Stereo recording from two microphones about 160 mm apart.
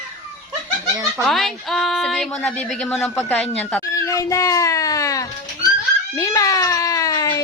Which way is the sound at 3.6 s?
15° left (ahead or behind).